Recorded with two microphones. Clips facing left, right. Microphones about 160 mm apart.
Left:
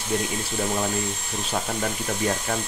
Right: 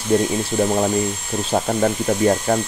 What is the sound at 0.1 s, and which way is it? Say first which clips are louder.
Speech: right 9 dB; 35° right (ahead or behind).